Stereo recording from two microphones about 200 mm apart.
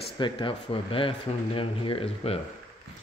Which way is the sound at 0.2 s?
25° left (ahead or behind).